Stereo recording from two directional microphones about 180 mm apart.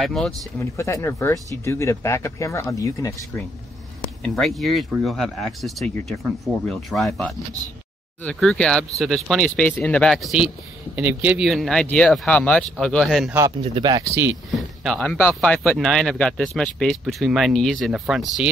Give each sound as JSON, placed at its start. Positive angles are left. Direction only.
{"t": 0.0, "sound": "speech", "side_deg": 0}
{"t": 0.6, "sound": "speech", "side_deg": 15}
{"t": 4.6, "sound": "speech", "side_deg": 0}
{"t": 13.6, "sound": "speech", "side_deg": -25}
{"t": 14.5, "sound": "speech", "side_deg": 0}